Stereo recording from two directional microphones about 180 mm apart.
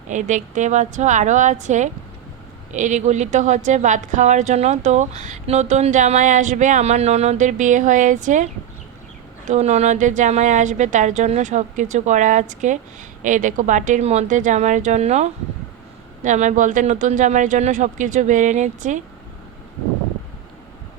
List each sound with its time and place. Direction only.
0.1 s a woman's voice: 45° right (ahead or behind)
9.5 s a woman's voice: 40° right (ahead or behind)